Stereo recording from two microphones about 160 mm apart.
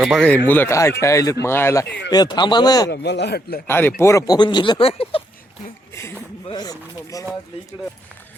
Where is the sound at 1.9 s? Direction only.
90° left.